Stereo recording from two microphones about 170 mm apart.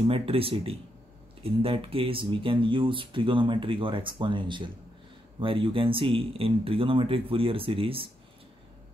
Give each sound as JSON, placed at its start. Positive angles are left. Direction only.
{"t": 0.0, "sound": "speech", "side_deg": -35}